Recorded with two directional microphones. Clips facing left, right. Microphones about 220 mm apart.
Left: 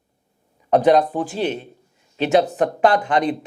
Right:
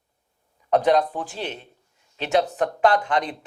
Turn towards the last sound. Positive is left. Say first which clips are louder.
# left 4 dB
turn(degrees=10)  # may be behind; listen again after turning